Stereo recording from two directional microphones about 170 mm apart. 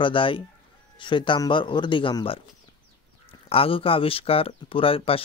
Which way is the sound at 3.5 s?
35° left (ahead or behind).